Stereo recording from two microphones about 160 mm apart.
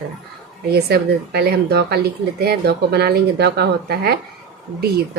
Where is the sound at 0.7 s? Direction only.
85° right.